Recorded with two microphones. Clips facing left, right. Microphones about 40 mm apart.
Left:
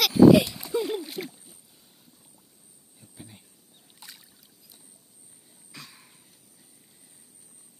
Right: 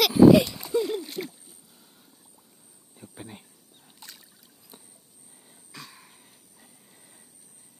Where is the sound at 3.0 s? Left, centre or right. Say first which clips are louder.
Right 6 dB; right.